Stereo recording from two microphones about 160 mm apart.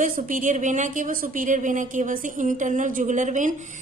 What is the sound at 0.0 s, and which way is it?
Speech, 55° right (ahead or behind).